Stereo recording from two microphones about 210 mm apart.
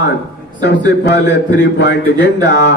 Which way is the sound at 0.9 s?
55° left (ahead or behind).